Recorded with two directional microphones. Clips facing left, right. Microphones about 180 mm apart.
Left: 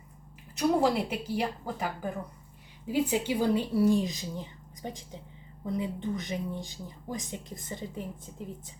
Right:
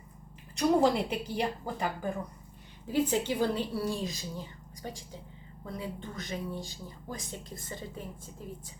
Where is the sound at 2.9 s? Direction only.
10° left (ahead or behind).